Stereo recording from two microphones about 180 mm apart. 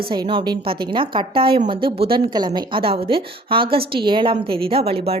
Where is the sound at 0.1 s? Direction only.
25° right (ahead or behind).